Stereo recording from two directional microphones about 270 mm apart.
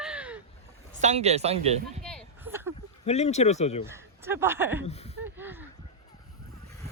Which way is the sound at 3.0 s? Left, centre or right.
Left.